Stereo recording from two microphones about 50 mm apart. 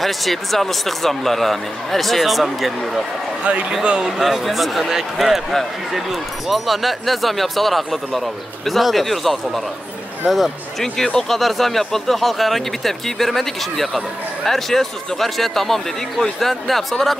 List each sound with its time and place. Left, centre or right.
0.0 s speech: centre
3.5 s speech: right
4.2 s speech: centre